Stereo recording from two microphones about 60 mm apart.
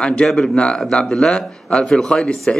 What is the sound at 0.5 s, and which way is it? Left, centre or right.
A man's voice, centre.